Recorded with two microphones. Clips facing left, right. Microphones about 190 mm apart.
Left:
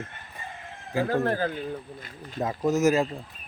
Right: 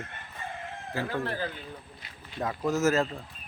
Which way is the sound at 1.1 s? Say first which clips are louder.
Left 9 dB; 45° left (ahead or behind).